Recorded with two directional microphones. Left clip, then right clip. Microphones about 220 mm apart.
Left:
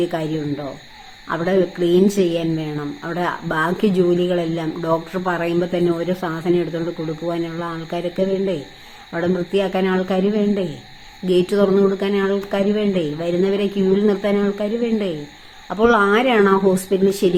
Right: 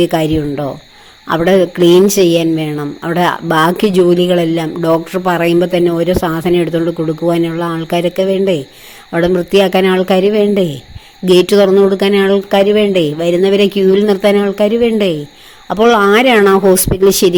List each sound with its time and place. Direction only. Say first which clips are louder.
0.0 s a woman's voice: right 9 dB; 45° right (ahead or behind)